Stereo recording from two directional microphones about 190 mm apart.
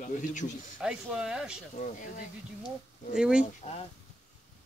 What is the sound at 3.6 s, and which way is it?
Speech, 35° left (ahead or behind).